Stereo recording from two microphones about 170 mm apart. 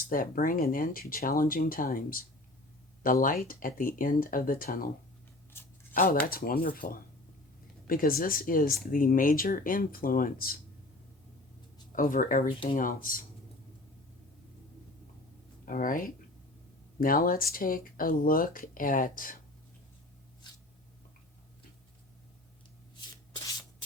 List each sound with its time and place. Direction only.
0.0 s speech: 55° left (ahead or behind)
5.5 s a sound: 15° left (ahead or behind)
5.9 s speech: 55° left (ahead or behind)
7.9 s speech: 55° left (ahead or behind)
11.9 s speech: 55° left (ahead or behind)
15.6 s speech: 55° left (ahead or behind)
20.4 s writing: 25° left (ahead or behind)